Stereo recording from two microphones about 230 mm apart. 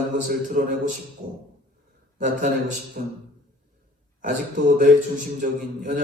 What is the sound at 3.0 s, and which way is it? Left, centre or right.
Speech, right.